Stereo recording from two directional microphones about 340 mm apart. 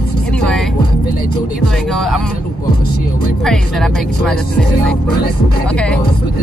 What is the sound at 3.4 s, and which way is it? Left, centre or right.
Speech, centre.